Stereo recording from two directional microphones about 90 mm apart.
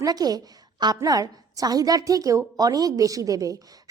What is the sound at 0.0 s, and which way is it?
A woman's voice, 45° right (ahead or behind).